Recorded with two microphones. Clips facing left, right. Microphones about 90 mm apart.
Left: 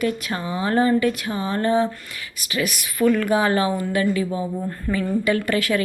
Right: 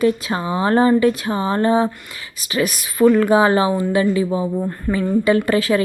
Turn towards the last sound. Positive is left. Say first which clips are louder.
# right 5 dB
turn(degrees=-30)  # may be behind; listen again after turning